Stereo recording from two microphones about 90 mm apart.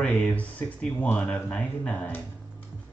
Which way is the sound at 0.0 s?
15° left (ahead or behind).